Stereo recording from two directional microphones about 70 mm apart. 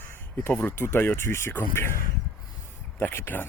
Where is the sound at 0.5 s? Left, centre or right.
Left.